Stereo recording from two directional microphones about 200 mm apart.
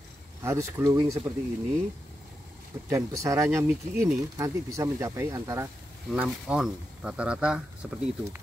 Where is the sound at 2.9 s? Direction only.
15° right (ahead or behind).